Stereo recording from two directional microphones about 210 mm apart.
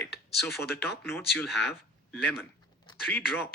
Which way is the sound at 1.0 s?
10° left (ahead or behind).